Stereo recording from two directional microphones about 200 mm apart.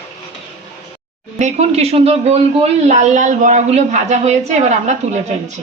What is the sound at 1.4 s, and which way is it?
A man's voice, 30° right (ahead or behind).